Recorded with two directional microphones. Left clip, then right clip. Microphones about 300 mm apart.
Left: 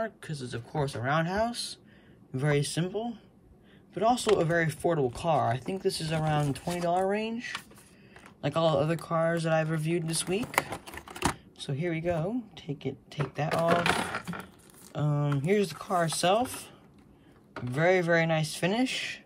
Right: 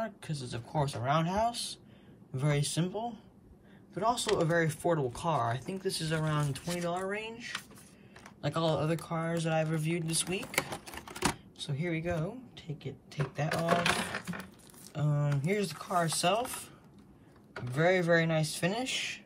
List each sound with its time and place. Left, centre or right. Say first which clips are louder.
0.0 s speech: left 3 dB; centre
10.5 s a sound: left 4 dB; centre
11.2 s speech: left 2 dB; centre
13.5 s speech: left 4 dB; left
15.0 s speech: left 4 dB; centre
17.7 s speech: left 2 dB; centre